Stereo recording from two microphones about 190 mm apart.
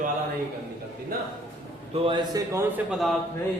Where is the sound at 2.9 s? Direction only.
Centre (ahead or behind).